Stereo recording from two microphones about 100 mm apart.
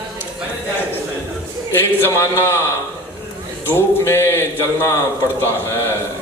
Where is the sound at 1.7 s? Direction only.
25° left (ahead or behind).